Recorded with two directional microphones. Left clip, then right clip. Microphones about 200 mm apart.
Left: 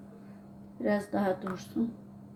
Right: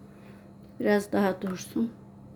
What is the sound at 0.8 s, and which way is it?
Speech, 60° right (ahead or behind).